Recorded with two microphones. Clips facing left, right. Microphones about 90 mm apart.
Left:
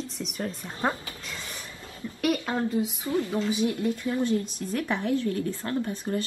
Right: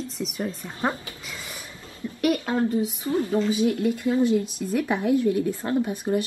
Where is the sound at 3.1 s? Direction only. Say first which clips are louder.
Right 5 dB; 30° right (ahead or behind).